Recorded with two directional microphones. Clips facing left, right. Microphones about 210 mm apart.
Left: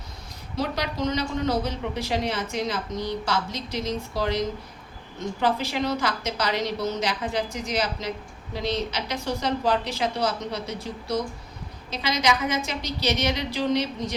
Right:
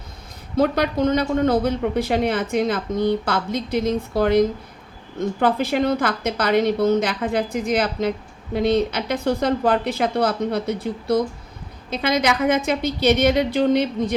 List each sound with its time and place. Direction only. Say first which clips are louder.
0.5 s a man's voice: right 9 dB; 55° right (ahead or behind)